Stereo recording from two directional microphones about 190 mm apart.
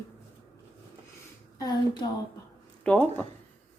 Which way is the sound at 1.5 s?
20° left (ahead or behind).